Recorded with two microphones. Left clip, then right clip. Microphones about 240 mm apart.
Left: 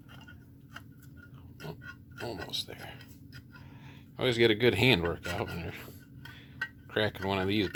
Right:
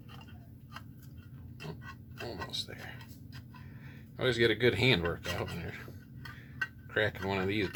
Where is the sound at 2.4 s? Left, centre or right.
Left.